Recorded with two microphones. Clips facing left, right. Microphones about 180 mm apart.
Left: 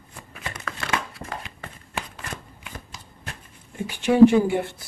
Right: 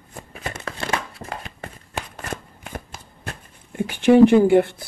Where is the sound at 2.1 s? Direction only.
45° right (ahead or behind).